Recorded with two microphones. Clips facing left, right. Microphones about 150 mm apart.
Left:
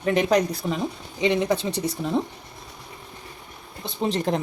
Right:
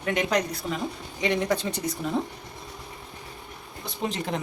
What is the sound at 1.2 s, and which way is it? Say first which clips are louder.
Speech: left 3 dB; 20° left (ahead or behind).